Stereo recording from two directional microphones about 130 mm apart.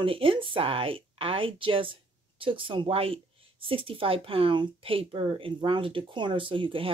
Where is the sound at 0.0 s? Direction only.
45° right (ahead or behind).